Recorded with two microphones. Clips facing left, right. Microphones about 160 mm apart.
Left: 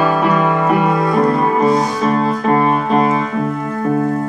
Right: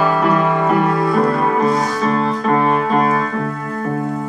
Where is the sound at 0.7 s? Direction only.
15° left (ahead or behind).